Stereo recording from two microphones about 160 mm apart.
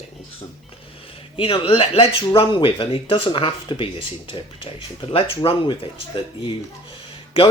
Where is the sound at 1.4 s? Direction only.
35° left (ahead or behind).